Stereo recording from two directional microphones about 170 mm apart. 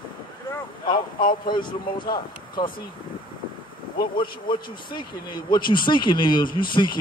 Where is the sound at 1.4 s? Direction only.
25° left (ahead or behind).